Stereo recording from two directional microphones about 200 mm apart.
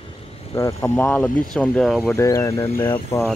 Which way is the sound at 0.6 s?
10° left (ahead or behind).